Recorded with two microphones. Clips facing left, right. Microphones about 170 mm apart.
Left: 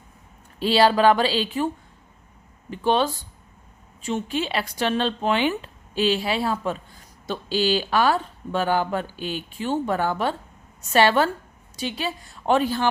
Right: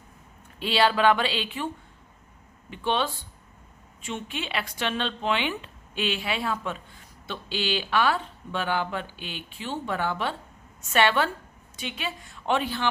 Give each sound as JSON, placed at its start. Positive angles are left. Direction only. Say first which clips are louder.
{"t": 0.6, "sound": "speech", "louder": "left 5 dB", "side_deg": 40}